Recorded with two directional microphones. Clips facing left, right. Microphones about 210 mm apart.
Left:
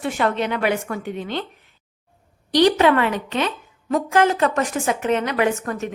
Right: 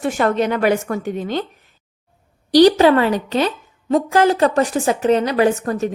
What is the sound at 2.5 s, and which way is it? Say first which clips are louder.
A woman's voice: right 5 dB; 35° right (ahead or behind).